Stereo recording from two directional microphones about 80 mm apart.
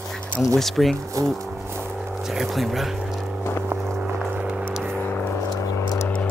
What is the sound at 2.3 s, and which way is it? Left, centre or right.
Speech, centre.